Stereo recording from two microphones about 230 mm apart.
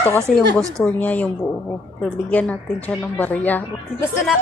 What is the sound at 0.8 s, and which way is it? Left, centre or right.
Speech, centre.